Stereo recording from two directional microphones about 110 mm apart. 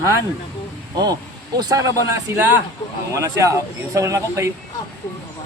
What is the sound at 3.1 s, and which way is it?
A man's voice, 30° right (ahead or behind).